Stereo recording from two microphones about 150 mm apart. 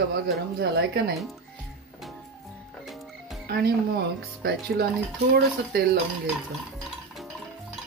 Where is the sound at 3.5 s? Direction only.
90° right.